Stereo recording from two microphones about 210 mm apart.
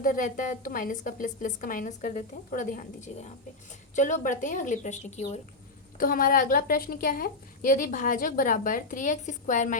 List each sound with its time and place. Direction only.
0.0 s a woman's voice: 40° left (ahead or behind)
6.0 s a woman's voice: 45° left (ahead or behind)